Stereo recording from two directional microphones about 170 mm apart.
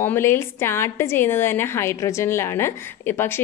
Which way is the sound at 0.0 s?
15° left (ahead or behind).